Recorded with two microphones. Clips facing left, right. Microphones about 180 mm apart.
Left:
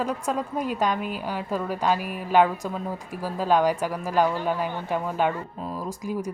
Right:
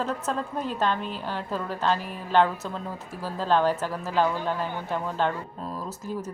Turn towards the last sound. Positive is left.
turn(degrees=15)  # may be behind; listen again after turning